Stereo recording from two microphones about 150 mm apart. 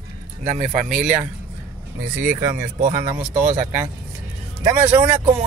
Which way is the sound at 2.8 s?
60° right (ahead or behind).